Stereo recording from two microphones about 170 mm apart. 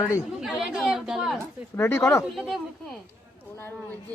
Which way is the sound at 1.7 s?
15° left (ahead or behind).